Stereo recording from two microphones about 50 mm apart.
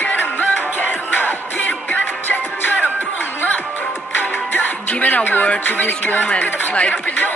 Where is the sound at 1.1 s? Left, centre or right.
Left.